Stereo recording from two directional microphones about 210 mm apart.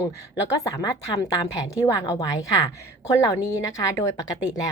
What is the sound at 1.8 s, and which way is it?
Speech, 15° left (ahead or behind).